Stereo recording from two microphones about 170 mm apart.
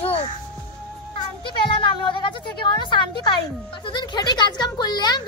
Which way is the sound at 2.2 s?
30° left (ahead or behind).